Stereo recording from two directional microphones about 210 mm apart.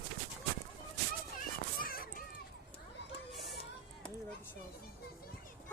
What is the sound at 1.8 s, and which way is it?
Children playing, 45° left (ahead or behind).